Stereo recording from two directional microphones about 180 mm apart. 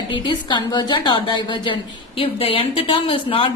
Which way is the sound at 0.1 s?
25° left (ahead or behind).